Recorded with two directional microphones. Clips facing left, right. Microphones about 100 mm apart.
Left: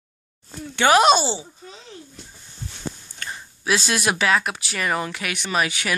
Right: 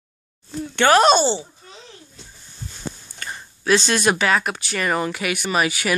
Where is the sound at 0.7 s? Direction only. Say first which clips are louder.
Right 1 dB; 10° left (ahead or behind).